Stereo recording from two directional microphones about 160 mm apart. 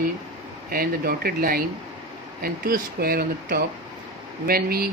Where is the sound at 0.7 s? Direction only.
65° right (ahead or behind).